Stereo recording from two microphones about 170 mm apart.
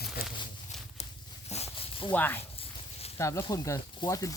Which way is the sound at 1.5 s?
40° left (ahead or behind).